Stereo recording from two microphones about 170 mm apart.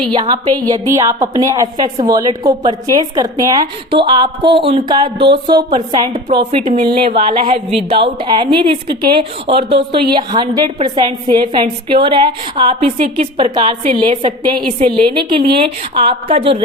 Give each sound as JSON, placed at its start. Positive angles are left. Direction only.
{"t": 0.1, "sound": "a woman's voice", "side_deg": -25}